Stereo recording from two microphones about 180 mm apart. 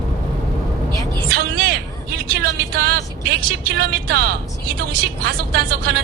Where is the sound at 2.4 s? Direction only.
60° right (ahead or behind).